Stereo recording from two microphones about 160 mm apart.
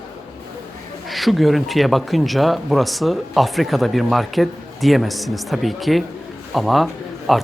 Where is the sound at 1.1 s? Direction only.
Centre (ahead or behind).